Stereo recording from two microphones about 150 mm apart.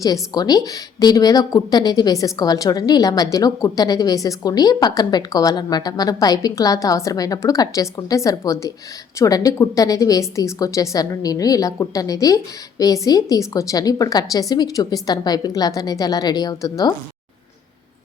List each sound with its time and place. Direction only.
0.0 s a woman's voice: 25° left (ahead or behind)